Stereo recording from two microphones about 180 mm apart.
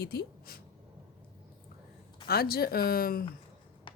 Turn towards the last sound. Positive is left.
turn(degrees=55)  # may be behind; listen again after turning